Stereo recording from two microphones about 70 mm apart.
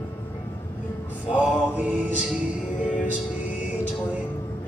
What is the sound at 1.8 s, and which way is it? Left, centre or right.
Music, right.